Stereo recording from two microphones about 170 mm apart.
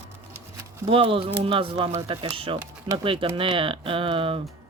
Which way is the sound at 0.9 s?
30° right (ahead or behind).